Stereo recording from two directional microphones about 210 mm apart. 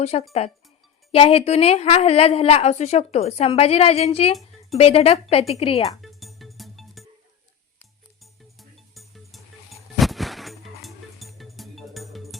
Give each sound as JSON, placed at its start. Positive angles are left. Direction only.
{"t": 0.0, "sound": "a woman's voice", "side_deg": 30}
{"t": 6.0, "sound": "music", "side_deg": 0}
{"t": 8.2, "sound": "music", "side_deg": 0}